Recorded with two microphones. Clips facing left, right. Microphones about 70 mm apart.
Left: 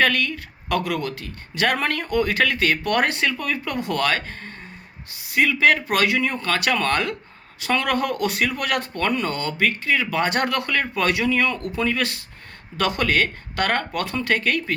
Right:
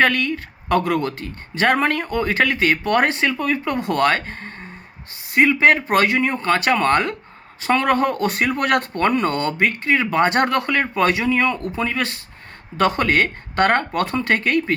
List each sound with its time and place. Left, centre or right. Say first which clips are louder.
0.0 s speech: right 3 dB; right